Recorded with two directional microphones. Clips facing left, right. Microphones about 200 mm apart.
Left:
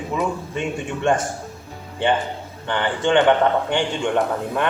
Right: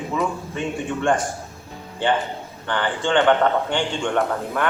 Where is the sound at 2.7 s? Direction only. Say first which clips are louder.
Left 2 dB; 20° left (ahead or behind).